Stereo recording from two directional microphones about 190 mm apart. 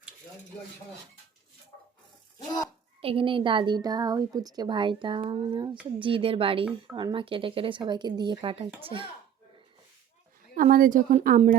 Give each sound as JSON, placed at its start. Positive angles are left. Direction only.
{"t": 3.0, "sound": "a woman's voice", "side_deg": -30}
{"t": 10.5, "sound": "a woman's voice", "side_deg": -45}